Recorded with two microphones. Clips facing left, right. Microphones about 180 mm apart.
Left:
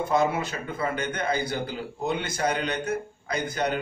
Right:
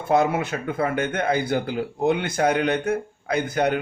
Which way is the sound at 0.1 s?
55° right (ahead or behind).